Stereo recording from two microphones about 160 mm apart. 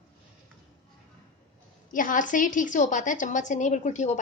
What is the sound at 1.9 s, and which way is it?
A woman's voice, 55° left (ahead or behind).